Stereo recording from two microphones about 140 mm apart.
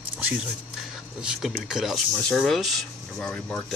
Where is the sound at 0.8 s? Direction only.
5° right (ahead or behind).